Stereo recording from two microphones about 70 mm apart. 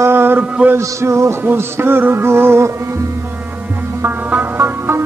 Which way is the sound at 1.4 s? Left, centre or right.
Right.